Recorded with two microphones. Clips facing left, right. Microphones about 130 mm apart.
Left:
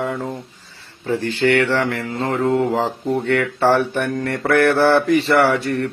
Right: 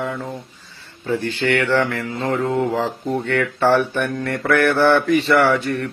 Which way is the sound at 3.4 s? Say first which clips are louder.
Even; 30° left (ahead or behind).